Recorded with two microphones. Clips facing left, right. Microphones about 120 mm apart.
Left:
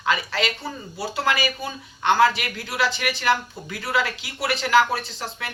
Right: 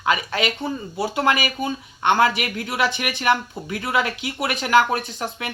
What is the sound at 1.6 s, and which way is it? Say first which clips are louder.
Speech: right 5 dB; 20° right (ahead or behind).